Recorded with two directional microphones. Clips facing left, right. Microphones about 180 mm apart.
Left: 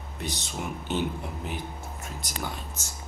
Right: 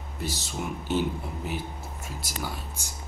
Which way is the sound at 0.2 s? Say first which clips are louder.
Right 1 dB; 5° right (ahead or behind).